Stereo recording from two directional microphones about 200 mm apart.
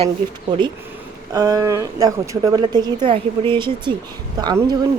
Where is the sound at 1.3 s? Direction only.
20° right (ahead or behind).